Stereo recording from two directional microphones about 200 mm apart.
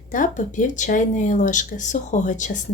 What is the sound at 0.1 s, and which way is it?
Speech, 40° left (ahead or behind).